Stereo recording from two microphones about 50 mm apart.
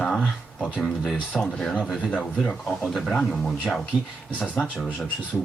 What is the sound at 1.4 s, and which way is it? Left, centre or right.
Speech, centre.